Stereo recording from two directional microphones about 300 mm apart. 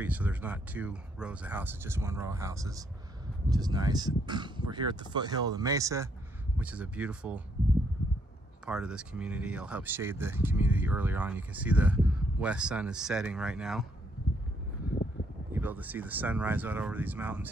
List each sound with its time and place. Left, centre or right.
0.0 s speech: centre
8.6 s speech: centre
15.5 s speech: centre